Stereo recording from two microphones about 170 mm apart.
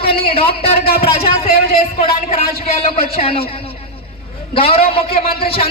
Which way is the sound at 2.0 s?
35° left (ahead or behind).